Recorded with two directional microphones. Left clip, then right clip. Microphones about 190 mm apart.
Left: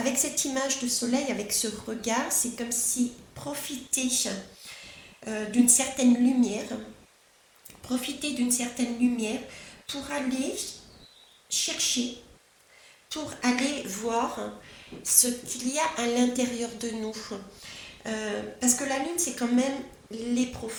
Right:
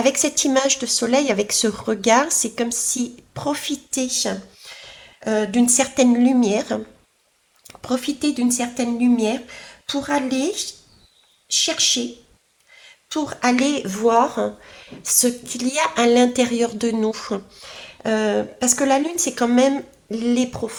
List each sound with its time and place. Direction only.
0.0 s speech: 40° right (ahead or behind)